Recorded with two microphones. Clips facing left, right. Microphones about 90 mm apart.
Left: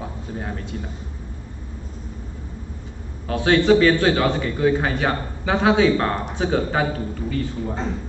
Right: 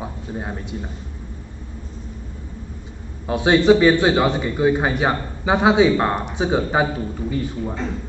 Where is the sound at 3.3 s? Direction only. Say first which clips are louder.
Right 2 dB; 20° right (ahead or behind).